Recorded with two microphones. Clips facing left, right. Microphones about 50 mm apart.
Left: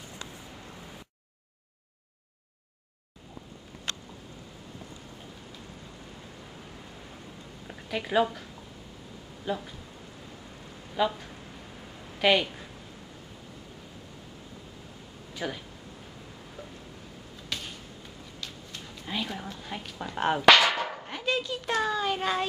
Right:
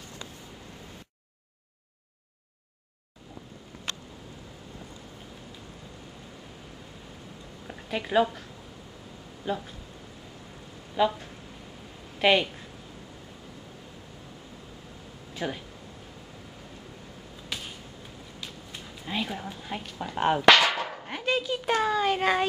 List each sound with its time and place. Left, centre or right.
7.6 s speech: centre
9.5 s child singing: centre
11.0 s child singing: centre
12.2 s speech: centre
15.3 s speech: centre
17.5 s a sound: centre
19.9 s speech: centre
21.1 s bow-wow: centre
21.5 s child singing: centre